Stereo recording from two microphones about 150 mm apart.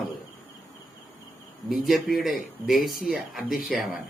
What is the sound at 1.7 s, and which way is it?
A man's voice, centre (ahead or behind).